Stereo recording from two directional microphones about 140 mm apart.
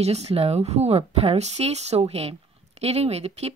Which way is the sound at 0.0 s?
50° right (ahead or behind).